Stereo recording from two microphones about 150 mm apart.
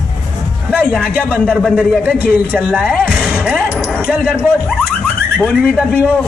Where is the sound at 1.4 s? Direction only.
5° left (ahead or behind).